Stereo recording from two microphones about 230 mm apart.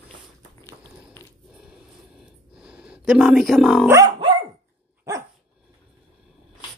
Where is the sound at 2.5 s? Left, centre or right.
Centre.